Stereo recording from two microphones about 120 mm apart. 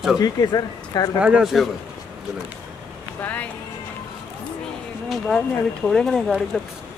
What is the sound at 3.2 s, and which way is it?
Speech, 15° left (ahead or behind).